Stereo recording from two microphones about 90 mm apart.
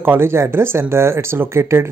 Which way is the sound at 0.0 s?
25° right (ahead or behind).